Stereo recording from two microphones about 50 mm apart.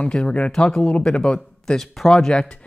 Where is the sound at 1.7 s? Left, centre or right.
Centre.